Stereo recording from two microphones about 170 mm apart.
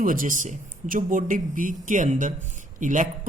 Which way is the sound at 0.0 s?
55° right (ahead or behind).